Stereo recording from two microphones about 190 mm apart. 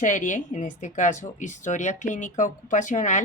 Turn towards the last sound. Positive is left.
turn(degrees=40)  # may be behind; listen again after turning